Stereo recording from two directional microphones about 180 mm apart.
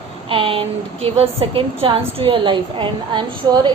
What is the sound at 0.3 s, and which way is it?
A woman's voice, 30° right (ahead or behind).